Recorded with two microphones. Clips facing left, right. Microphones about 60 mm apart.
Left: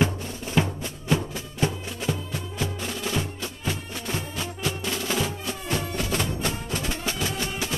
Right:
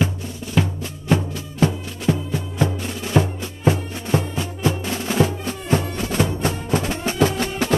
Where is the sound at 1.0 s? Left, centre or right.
Right.